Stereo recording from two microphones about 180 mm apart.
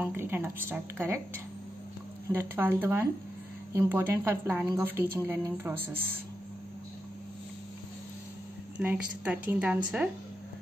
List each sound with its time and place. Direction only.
0.0 s a woman's voice: 10° right (ahead or behind)
2.2 s a woman's voice: 15° right (ahead or behind)
8.7 s a woman's voice: 5° right (ahead or behind)